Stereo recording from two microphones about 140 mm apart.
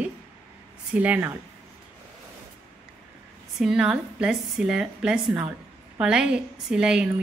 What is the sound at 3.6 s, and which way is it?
Speech, 5° right (ahead or behind).